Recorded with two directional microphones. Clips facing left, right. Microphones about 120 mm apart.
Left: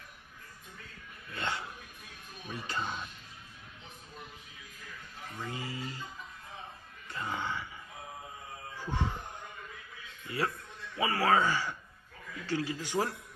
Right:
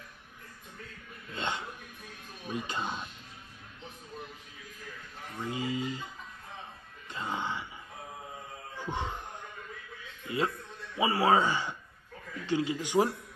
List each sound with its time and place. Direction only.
1.3 s speech: 20° right (ahead or behind)
5.4 s speech: 20° right (ahead or behind)
7.1 s music: 20° right (ahead or behind)
8.7 s a sound: 20° right (ahead or behind)
10.2 s a man's voice: 20° right (ahead or behind)